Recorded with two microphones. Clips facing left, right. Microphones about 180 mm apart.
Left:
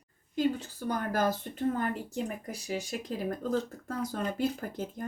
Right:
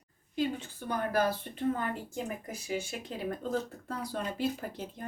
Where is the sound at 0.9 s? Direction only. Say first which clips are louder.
Even; 45° left (ahead or behind).